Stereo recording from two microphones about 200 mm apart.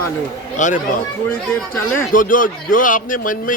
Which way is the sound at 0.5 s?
40° left (ahead or behind).